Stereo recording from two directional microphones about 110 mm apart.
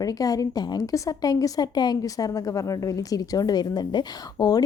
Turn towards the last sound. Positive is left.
turn(degrees=35)  # may be behind; listen again after turning